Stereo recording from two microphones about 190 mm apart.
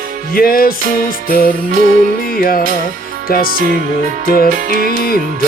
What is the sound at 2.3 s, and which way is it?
Music, 50° left (ahead or behind).